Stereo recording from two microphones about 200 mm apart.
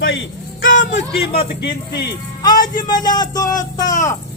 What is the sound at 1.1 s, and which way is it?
A man's voice, 30° left (ahead or behind).